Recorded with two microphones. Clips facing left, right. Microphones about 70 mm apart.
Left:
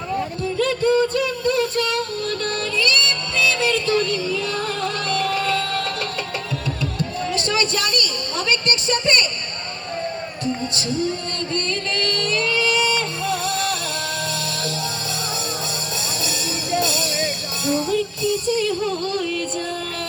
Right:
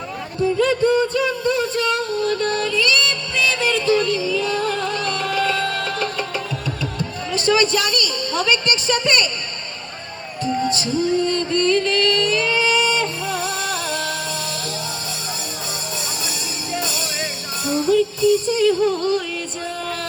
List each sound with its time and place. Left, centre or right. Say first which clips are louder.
0.6 s a sound: even; left
2.3 s music: right 4 dB; right
2.6 s music: right 2 dB; left
7.3 s a woman's voice: right 6 dB; left
10.8 s music: right 4 dB; left
17.7 s music: right 4 dB; left